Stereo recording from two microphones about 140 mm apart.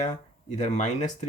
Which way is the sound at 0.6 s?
55° left (ahead or behind).